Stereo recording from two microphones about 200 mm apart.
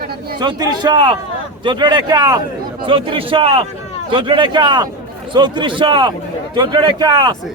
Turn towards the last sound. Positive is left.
turn(degrees=-20)  # may be behind; listen again after turning